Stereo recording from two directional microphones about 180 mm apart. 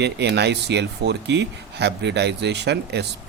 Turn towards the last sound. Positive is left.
turn(degrees=-70)  # may be behind; listen again after turning